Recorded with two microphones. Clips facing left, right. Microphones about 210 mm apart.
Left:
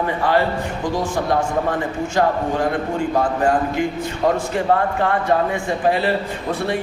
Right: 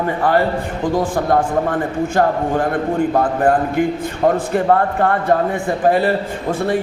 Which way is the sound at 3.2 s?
55° right (ahead or behind).